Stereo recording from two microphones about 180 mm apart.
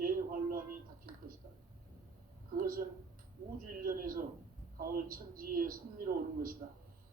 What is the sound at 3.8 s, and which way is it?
Speech, 50° right (ahead or behind).